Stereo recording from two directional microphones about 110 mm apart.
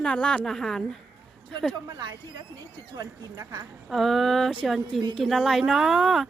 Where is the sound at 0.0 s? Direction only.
10° left (ahead or behind).